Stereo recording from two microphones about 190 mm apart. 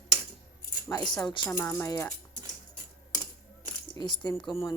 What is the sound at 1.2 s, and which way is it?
Speech, 25° left (ahead or behind).